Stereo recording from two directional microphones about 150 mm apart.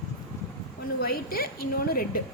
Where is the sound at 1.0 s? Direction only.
90° left.